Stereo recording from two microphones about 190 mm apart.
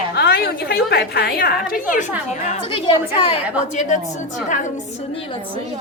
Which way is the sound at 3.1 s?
30° left (ahead or behind).